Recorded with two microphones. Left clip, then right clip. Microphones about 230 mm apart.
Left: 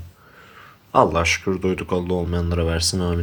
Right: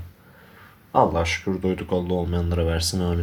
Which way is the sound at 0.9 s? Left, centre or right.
Centre.